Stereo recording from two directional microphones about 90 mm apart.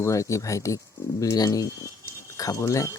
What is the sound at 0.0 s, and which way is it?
Speech, 35° left (ahead or behind).